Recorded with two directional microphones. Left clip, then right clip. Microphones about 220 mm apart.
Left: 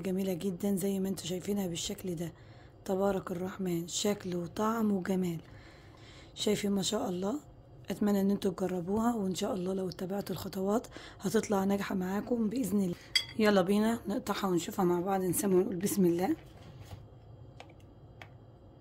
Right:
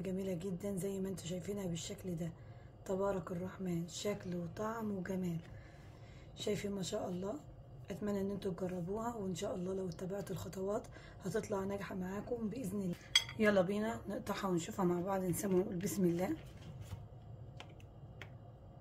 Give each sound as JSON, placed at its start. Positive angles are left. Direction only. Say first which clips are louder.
{"t": 0.0, "sound": "a woman's voice", "louder": "left 7 dB", "side_deg": 45}